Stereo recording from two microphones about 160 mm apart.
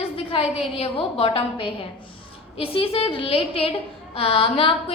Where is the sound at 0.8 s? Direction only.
35° left (ahead or behind).